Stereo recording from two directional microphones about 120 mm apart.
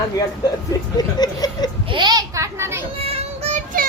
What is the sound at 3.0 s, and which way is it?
Child singing, 60° right (ahead or behind).